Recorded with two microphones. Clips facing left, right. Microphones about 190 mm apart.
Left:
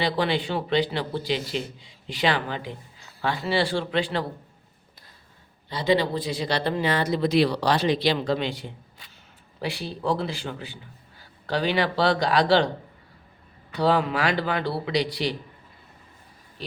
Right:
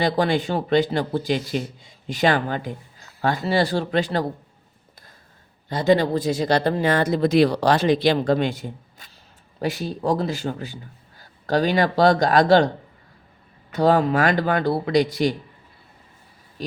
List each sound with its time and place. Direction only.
0.0 s speech: 45° right (ahead or behind)
5.6 s speech: 45° right (ahead or behind)
13.7 s speech: 45° right (ahead or behind)
16.6 s speech: 45° right (ahead or behind)